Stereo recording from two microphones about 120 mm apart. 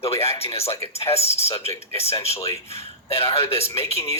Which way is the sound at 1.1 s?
60° left (ahead or behind).